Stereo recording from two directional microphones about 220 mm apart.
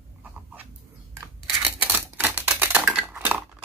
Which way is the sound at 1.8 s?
10° right (ahead or behind).